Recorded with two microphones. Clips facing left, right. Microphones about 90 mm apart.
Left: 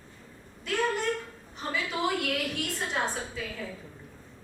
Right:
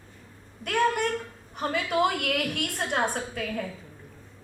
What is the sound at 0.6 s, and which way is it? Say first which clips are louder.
A woman's voice: right 4 dB; 60° right (ahead or behind).